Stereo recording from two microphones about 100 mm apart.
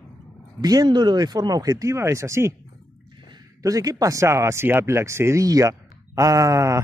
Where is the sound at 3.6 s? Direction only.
35° right (ahead or behind).